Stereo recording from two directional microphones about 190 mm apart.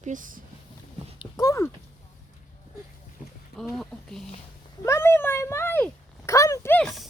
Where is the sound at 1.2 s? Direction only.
20° left (ahead or behind).